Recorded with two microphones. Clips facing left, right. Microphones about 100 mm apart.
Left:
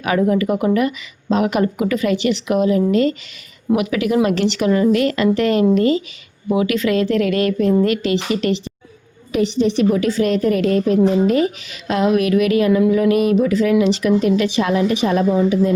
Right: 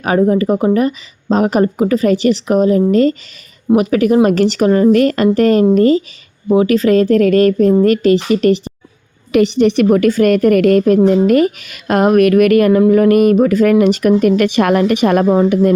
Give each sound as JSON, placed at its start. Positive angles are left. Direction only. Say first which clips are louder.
{"t": 0.0, "sound": "speech", "louder": "right 4 dB", "side_deg": -35}
{"t": 9.3, "sound": "a woman's voice", "louder": "right 6 dB", "side_deg": -70}